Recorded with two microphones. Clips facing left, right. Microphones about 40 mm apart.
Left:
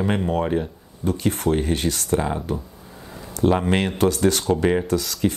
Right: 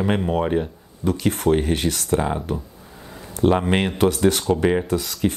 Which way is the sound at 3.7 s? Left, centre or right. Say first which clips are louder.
Right 1 dB; right.